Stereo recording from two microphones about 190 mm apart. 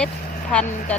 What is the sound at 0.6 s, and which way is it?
Speech, 40° left (ahead or behind).